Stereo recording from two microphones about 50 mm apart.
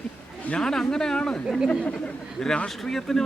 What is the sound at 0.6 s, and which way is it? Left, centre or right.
Speech, centre.